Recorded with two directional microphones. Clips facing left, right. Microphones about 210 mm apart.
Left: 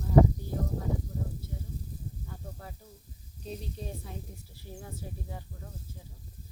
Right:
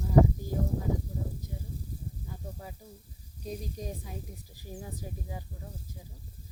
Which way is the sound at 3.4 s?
10° right (ahead or behind).